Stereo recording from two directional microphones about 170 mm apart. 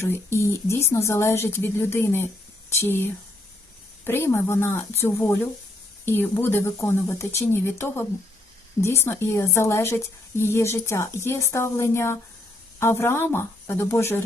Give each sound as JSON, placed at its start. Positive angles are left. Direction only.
{"t": 0.0, "sound": "a woman's voice", "side_deg": 15}